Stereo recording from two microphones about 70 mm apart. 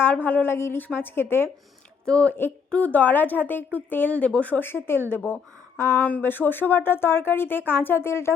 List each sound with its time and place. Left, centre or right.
0.0 s speech: left
2.0 s speech: centre; by 6.0 s left
6.0 s speech: left